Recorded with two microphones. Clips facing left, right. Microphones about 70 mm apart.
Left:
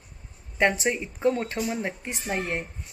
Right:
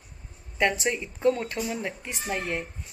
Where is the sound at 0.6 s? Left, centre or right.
Left.